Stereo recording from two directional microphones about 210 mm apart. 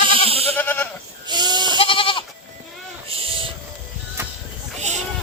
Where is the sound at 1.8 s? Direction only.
25° left (ahead or behind).